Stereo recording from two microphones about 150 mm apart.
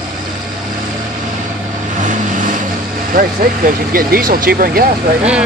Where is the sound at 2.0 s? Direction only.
60° right (ahead or behind).